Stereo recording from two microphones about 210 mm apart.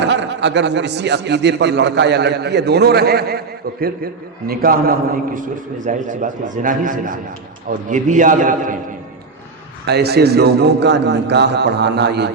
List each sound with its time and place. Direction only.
0.0 s a man's voice: 55° right (ahead or behind); by 8.8 s 40° right (ahead or behind)
9.8 s a man's voice: 50° right (ahead or behind)